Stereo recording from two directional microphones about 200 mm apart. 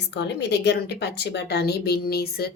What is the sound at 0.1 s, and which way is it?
A woman's voice, 60° left (ahead or behind).